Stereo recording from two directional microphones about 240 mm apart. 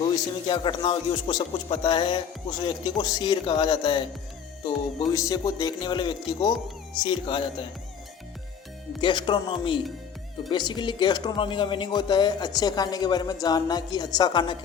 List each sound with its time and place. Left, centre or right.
0.4 s speech: centre
9.0 s speech: centre